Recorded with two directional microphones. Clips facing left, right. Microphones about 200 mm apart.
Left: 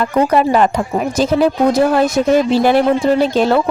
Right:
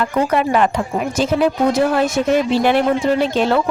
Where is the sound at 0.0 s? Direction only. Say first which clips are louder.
Left 4 dB; 35° left (ahead or behind).